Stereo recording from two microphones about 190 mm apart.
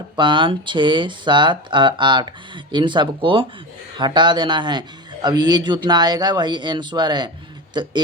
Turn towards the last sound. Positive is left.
turn(degrees=-25)  # may be behind; listen again after turning